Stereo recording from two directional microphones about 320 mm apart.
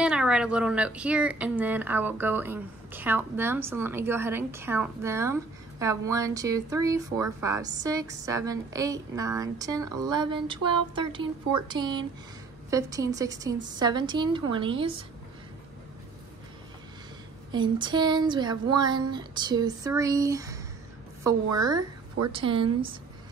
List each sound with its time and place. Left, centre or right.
0.0 s speech: centre
17.5 s speech: centre